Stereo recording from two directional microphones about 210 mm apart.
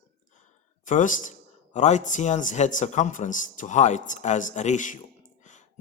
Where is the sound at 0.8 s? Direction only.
40° left (ahead or behind).